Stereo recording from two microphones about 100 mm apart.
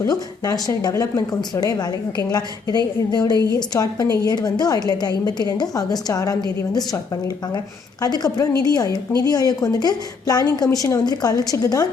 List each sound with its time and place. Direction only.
0.0 s a woman's voice: 40° left (ahead or behind)
8.0 s speech: 40° left (ahead or behind)